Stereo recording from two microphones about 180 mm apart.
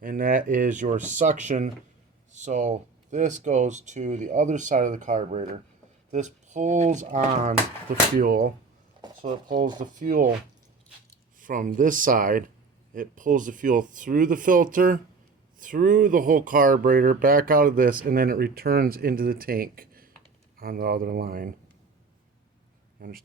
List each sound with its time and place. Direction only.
0.0 s speech: 50° right (ahead or behind)
11.3 s speech: 45° right (ahead or behind)
23.0 s speech: 55° right (ahead or behind)